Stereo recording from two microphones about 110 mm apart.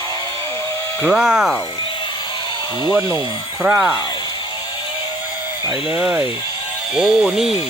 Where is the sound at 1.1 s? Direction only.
5° right (ahead or behind).